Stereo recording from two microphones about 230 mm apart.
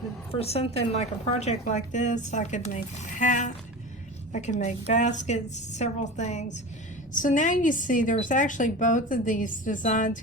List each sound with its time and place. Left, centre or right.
0.3 s a woman's voice: left